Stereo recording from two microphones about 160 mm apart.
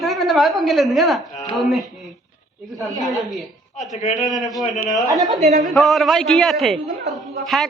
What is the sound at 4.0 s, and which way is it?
Speech, 40° left (ahead or behind).